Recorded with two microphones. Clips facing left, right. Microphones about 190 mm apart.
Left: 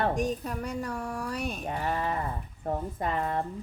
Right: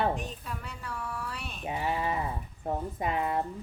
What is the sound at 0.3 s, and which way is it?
Speech, 40° left (ahead or behind).